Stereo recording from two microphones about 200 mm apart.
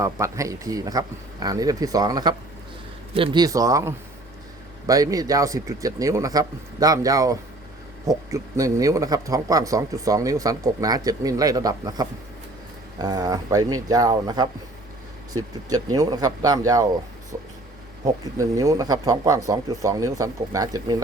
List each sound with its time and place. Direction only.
0.0 s a man's voice: 15° right (ahead or behind)
18.0 s a man's voice: 15° right (ahead or behind)